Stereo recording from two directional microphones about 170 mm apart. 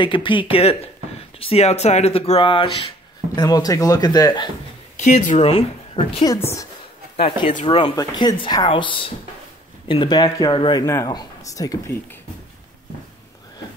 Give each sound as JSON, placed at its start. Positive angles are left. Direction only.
{"t": 0.0, "sound": "speech", "side_deg": 30}
{"t": 4.9, "sound": "a woman's voice", "side_deg": 45}
{"t": 6.3, "sound": "a woman's voice", "side_deg": 20}
{"t": 7.2, "sound": "speech", "side_deg": 35}